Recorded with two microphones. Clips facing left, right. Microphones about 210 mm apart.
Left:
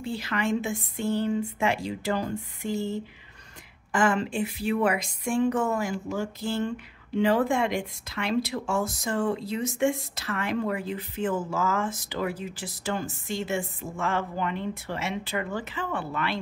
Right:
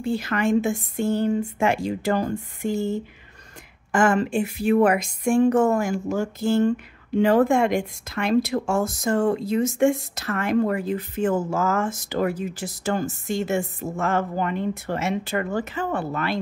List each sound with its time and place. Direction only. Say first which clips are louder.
0.0 s speech: right 6 dB; 45° right (ahead or behind)